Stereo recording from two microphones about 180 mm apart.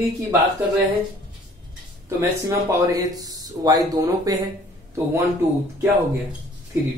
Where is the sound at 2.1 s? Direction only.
15° right (ahead or behind).